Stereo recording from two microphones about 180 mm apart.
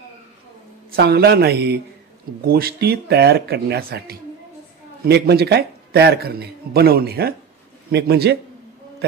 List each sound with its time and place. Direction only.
0.9 s a man's voice: 60° right (ahead or behind)